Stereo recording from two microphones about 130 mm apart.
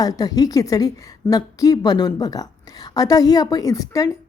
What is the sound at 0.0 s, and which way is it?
A woman's voice, 30° left (ahead or behind).